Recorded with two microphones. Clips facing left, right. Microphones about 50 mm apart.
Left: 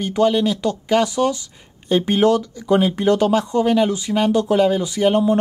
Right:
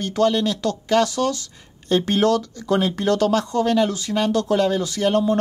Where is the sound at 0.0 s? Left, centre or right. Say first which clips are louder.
Left 2 dB; centre.